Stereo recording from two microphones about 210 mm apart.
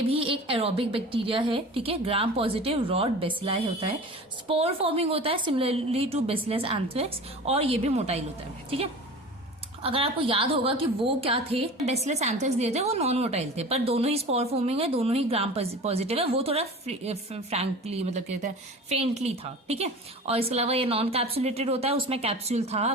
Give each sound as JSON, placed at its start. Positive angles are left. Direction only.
{"t": 0.1, "sound": "a woman's voice", "side_deg": -25}
{"t": 9.8, "sound": "a woman's voice", "side_deg": -25}